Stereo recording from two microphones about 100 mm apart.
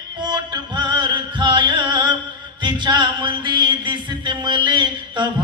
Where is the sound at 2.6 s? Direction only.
50° right (ahead or behind).